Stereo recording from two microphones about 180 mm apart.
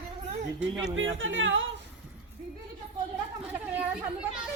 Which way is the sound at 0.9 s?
90° right.